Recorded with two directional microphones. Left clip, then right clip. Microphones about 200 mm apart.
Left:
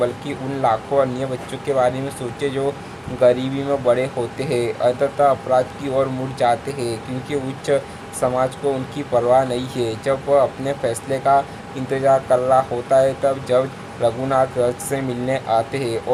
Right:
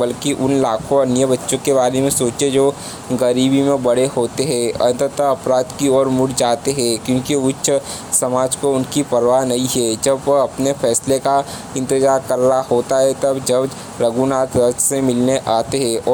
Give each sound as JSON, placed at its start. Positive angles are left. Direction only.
{"t": 0.0, "sound": "speech", "side_deg": -35}